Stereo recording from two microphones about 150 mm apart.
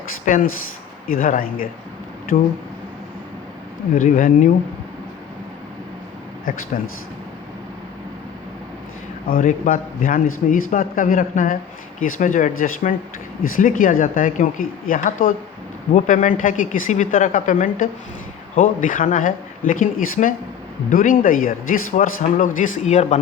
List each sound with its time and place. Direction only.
0.3 s a man's voice: 60° left (ahead or behind)
3.9 s a man's voice: 60° left (ahead or behind)
6.7 s speech: 70° left (ahead or behind)
9.2 s a man's voice: 65° left (ahead or behind); by 23.2 s 50° left (ahead or behind)